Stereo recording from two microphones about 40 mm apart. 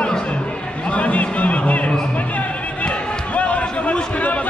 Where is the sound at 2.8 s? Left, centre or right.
Left.